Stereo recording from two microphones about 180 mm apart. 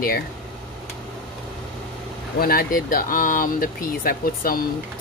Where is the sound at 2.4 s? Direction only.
55° left (ahead or behind).